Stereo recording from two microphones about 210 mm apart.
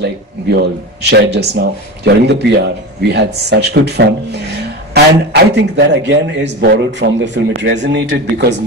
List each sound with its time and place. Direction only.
1.1 s a man's voice: 55° right (ahead or behind)